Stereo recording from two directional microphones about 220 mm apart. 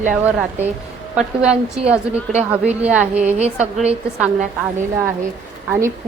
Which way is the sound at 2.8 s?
5° right (ahead or behind).